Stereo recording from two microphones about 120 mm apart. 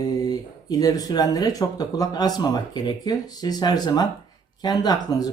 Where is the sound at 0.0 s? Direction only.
30° left (ahead or behind).